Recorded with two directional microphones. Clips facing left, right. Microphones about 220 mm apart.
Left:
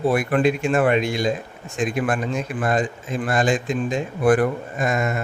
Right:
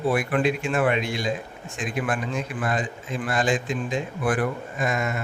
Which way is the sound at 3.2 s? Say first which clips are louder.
Left 3 dB; 45° left (ahead or behind).